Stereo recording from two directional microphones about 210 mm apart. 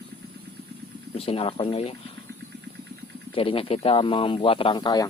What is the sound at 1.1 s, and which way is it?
Speech, 30° left (ahead or behind).